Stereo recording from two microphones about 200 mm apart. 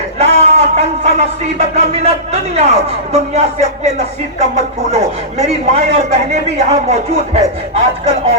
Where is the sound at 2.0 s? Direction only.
35° right (ahead or behind).